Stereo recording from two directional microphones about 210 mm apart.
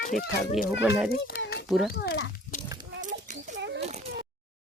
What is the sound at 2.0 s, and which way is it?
Speech, 55° left (ahead or behind).